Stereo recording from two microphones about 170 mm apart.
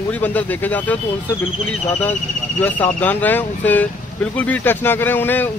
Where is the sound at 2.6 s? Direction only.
10° left (ahead or behind).